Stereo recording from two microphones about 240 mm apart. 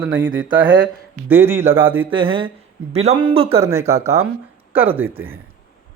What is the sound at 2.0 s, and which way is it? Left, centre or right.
Speech, right.